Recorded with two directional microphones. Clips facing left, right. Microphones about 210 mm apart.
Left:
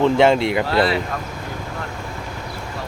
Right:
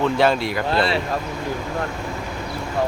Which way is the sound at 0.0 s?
20° left (ahead or behind).